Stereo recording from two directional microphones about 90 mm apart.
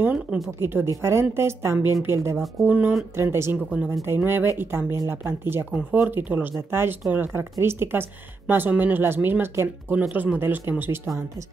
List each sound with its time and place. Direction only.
0.0 s music: 15° right (ahead or behind)
0.6 s a woman's voice: 25° right (ahead or behind)
2.6 s music: 15° right (ahead or behind)
3.2 s speech: 30° right (ahead or behind)